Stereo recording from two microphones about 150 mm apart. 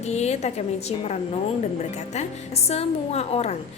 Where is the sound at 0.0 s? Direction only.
45° left (ahead or behind).